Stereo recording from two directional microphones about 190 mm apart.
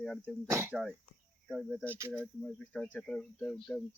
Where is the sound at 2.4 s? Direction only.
5° left (ahead or behind).